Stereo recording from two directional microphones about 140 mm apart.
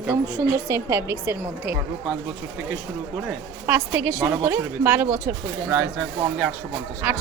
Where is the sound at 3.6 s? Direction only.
15° right (ahead or behind).